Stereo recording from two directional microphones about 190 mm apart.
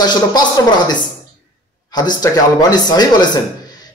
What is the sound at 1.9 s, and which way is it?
A man's voice, 20° left (ahead or behind).